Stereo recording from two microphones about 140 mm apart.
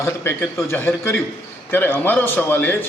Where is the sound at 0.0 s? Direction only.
15° left (ahead or behind).